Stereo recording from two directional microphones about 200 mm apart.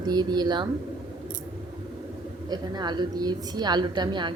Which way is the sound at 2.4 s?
20° right (ahead or behind).